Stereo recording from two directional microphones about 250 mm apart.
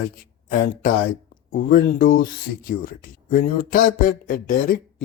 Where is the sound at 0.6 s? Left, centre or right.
Left.